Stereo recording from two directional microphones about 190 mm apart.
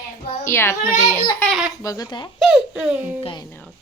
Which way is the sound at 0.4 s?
15° left (ahead or behind).